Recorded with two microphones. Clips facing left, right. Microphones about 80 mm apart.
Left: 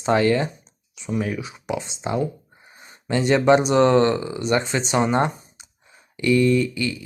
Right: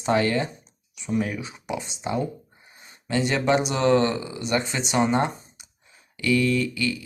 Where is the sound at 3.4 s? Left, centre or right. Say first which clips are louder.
Left 7 dB; left.